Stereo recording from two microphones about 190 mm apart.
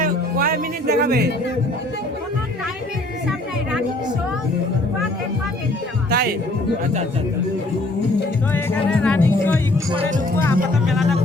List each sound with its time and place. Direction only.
0.0 s music: 50° right (ahead or behind)
6.1 s music: 55° right (ahead or behind)
8.5 s music: 5° left (ahead or behind)
10.3 s speech: 10° left (ahead or behind)